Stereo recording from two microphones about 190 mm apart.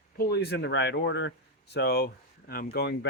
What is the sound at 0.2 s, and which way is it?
Speech, 55° left (ahead or behind).